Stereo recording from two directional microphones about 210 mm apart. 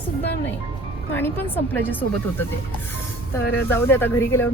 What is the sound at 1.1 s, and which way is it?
Speech, 10° left (ahead or behind).